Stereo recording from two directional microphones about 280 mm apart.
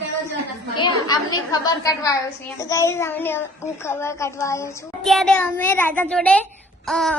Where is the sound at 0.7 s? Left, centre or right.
Centre.